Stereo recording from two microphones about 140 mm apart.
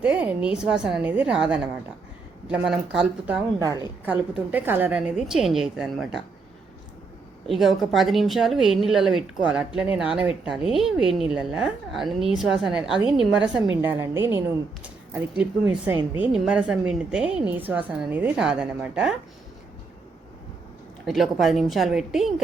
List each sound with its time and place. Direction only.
0.0 s a woman's voice: 10° right (ahead or behind)
3.6 s a woman's voice: 25° right (ahead or behind)
4.0 s speech: 10° right (ahead or behind)
7.4 s speech: centre (ahead or behind)
13.8 s a woman's voice: 15° right (ahead or behind)
15.1 s a woman's voice: 5° right (ahead or behind)
21.1 s speech: centre (ahead or behind)